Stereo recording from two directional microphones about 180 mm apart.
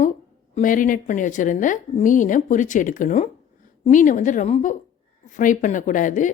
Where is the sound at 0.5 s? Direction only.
45° left (ahead or behind).